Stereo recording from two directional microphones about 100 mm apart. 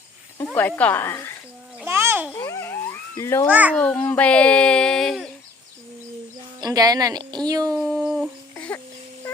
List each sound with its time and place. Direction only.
0.3 s speech: 20° left (ahead or behind)
1.8 s a sound: 25° right (ahead or behind)
2.6 s a sound: 25° left (ahead or behind)
3.5 s a child's voice: 15° right (ahead or behind)
3.8 s a sound: 10° left (ahead or behind)
6.6 s speech: 40° right (ahead or behind)
7.8 s dog: 20° right (ahead or behind)
8.0 s humming: 5° right (ahead or behind)
8.5 s music: 15° left (ahead or behind)